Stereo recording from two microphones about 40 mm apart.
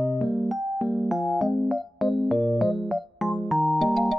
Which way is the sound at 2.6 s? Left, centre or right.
Centre.